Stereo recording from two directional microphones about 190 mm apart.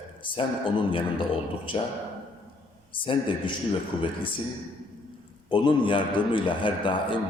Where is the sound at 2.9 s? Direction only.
25° left (ahead or behind).